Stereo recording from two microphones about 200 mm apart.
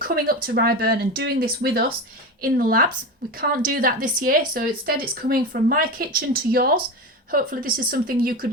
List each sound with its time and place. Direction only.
0.0 s speech: 45° right (ahead or behind)